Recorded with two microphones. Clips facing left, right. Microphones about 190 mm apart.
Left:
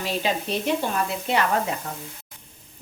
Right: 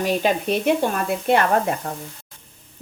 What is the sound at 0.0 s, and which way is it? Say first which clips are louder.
A woman's voice: right 6 dB; 50° right (ahead or behind).